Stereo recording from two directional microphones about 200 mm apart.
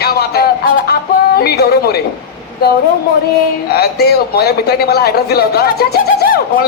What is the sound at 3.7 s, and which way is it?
A man's voice, 50° left (ahead or behind).